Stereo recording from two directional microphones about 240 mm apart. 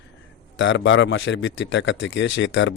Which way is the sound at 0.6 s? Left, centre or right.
Left.